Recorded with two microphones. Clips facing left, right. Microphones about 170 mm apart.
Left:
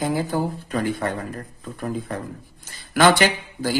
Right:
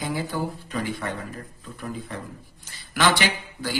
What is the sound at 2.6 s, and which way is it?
Speech, 45° left (ahead or behind).